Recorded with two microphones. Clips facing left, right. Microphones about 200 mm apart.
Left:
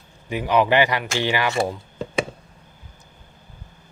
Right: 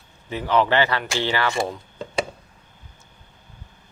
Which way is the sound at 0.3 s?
15° left (ahead or behind).